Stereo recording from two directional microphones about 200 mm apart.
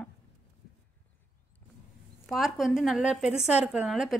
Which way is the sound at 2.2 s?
Centre (ahead or behind).